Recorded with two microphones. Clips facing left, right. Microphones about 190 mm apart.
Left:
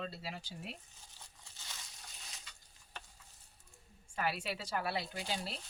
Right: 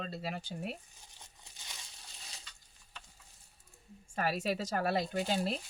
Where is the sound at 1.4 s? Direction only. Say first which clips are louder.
Even; 15° right (ahead or behind).